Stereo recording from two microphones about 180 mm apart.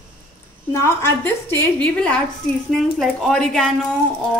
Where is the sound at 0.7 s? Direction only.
15° left (ahead or behind).